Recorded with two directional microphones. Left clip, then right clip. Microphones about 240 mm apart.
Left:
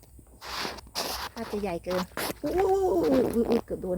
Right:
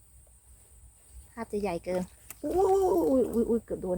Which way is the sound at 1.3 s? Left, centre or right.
Centre.